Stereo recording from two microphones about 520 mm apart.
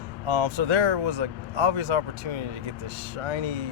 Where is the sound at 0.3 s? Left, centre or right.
Right.